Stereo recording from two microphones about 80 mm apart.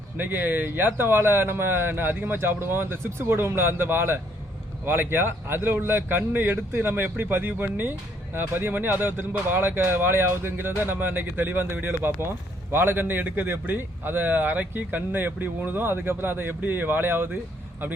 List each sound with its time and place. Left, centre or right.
0.2 s speech: right